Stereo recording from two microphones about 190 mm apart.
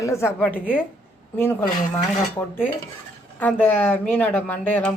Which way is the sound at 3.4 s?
10° left (ahead or behind).